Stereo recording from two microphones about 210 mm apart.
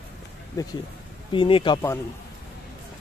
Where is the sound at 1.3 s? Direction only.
25° left (ahead or behind).